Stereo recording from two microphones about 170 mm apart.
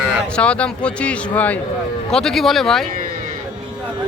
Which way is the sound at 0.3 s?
5° left (ahead or behind).